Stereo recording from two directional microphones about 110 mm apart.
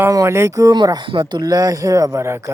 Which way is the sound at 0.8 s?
40° right (ahead or behind).